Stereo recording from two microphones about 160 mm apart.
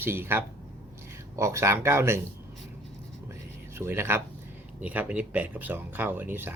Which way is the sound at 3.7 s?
15° right (ahead or behind).